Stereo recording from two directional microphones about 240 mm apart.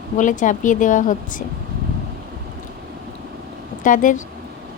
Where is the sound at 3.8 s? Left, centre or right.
Left.